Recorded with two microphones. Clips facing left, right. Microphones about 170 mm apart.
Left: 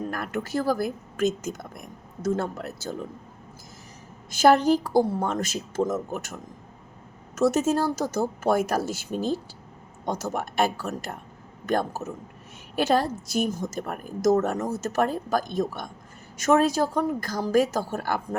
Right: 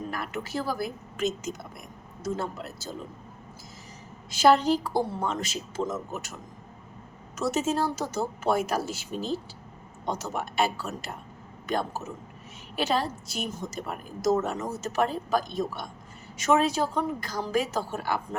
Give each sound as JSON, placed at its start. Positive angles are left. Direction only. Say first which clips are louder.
{"t": 0.1, "sound": "a woman's voice", "louder": "left 4 dB", "side_deg": 50}
{"t": 4.3, "sound": "a woman's voice", "louder": "left 2 dB", "side_deg": 50}
{"t": 7.3, "sound": "a woman's voice", "louder": "left 5 dB", "side_deg": 45}
{"t": 10.3, "sound": "a woman's voice", "louder": "left 2 dB", "side_deg": 45}